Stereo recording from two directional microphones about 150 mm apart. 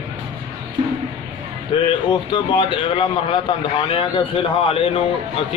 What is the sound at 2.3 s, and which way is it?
A man's voice, 35° left (ahead or behind).